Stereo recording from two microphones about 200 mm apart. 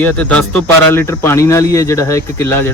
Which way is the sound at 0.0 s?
5° left (ahead or behind).